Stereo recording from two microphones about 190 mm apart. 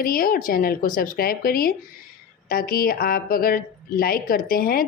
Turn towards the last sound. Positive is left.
turn(degrees=50)  # may be behind; listen again after turning